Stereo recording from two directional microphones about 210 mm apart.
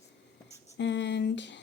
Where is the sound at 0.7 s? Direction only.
60° left (ahead or behind).